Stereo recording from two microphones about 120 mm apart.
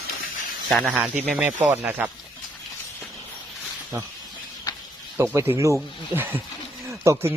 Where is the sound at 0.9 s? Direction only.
10° right (ahead or behind).